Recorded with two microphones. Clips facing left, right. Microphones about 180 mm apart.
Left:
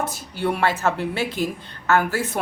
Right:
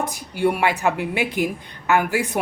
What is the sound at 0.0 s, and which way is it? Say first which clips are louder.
Speech: right 4 dB; 15° right (ahead or behind).